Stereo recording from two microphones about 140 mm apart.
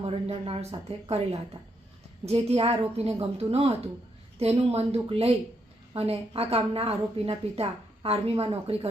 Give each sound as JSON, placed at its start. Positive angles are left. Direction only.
{"t": 0.0, "sound": "a woman's voice", "side_deg": -45}
{"t": 2.2, "sound": "a woman's voice", "side_deg": -45}